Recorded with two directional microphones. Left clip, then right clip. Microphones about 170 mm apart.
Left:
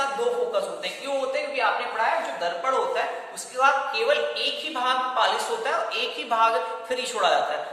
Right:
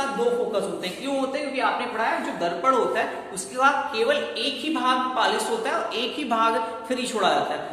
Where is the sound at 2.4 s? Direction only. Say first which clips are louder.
Right 3 dB; 30° right (ahead or behind).